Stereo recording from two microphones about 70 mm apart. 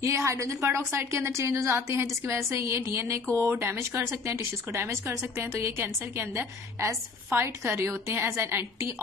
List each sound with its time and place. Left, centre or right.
0.0 s a woman's voice: right